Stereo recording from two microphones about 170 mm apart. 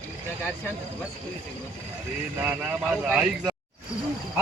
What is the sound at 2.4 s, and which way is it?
Speech, 10° right (ahead or behind).